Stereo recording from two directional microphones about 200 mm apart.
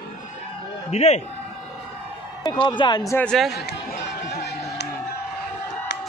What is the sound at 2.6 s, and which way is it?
Speech, 25° left (ahead or behind).